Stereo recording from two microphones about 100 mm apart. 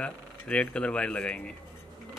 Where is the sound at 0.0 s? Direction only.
10° left (ahead or behind).